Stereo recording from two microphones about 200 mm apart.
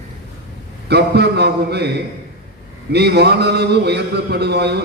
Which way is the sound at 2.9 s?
55° right (ahead or behind).